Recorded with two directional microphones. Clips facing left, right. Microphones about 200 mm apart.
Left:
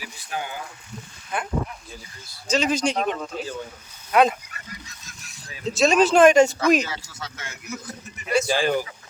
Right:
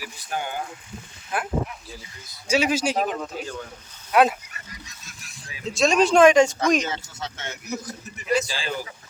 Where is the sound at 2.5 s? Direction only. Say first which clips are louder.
Even; 10° right (ahead or behind).